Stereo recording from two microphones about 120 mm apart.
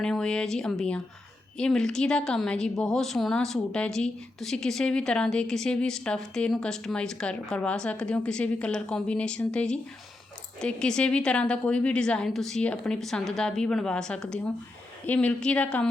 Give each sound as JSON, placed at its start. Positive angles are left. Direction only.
{"t": 0.0, "sound": "a woman's voice", "side_deg": 5}